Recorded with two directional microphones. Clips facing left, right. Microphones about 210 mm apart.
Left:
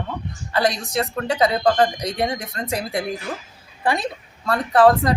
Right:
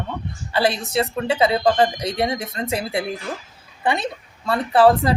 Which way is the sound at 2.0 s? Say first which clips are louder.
Right 1 dB; 30° right (ahead or behind).